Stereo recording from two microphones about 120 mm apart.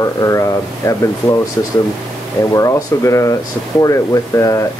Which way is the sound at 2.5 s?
25° left (ahead or behind).